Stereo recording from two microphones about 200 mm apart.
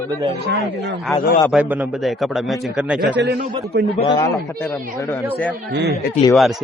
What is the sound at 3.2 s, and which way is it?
Speech, 55° right (ahead or behind).